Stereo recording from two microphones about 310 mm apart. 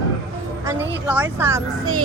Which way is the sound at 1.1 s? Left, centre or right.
Centre.